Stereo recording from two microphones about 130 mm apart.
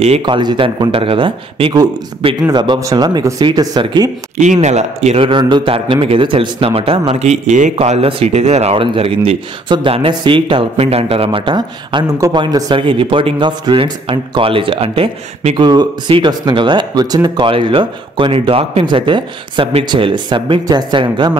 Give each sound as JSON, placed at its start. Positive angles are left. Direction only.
{"t": 0.2, "sound": "speech", "side_deg": -35}
{"t": 4.4, "sound": "a man's voice", "side_deg": -65}
{"t": 7.7, "sound": "a man's voice", "side_deg": -50}